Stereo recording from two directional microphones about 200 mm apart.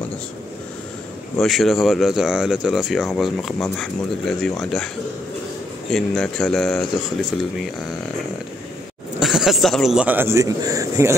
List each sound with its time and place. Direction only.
1.4 s speech: centre (ahead or behind)
5.9 s speech: 5° left (ahead or behind)
9.2 s speech: centre (ahead or behind)